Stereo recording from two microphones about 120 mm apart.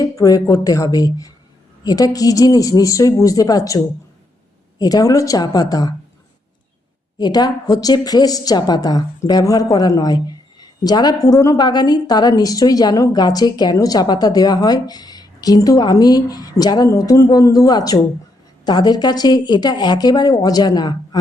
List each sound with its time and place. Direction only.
0.0 s a woman's voice: 30° left (ahead or behind)
4.8 s a woman's voice: 30° left (ahead or behind)
7.2 s a woman's voice: 35° left (ahead or behind)